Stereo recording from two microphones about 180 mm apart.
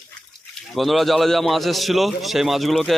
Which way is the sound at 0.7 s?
Centre (ahead or behind).